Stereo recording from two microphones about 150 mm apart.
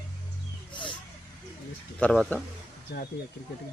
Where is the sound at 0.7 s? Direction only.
30° left (ahead or behind).